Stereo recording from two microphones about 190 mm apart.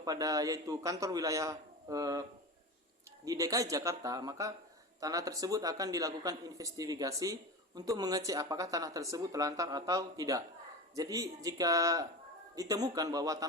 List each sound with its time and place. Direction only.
0.0 s a man's voice: 20° right (ahead or behind)
3.2 s a man's voice: 20° right (ahead or behind)